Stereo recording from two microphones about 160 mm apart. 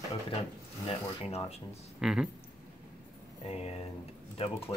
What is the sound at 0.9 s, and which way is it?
Speech, 40° left (ahead or behind).